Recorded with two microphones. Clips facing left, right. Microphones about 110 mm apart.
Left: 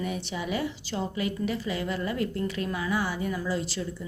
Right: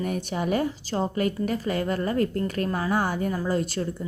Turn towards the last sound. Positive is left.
turn(degrees=-50)  # may be behind; listen again after turning